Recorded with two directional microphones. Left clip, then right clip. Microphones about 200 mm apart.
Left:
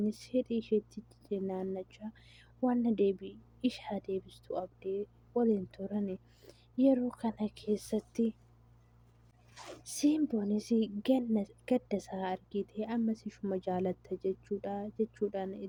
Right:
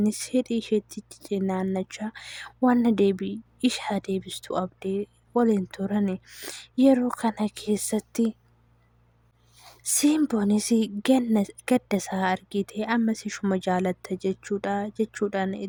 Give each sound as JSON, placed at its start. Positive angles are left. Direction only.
{"t": 0.0, "sound": "speech", "side_deg": -45}
{"t": 9.8, "sound": "speech", "side_deg": -45}